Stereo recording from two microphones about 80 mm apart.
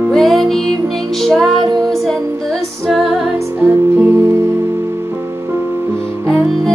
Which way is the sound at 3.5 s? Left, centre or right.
Right.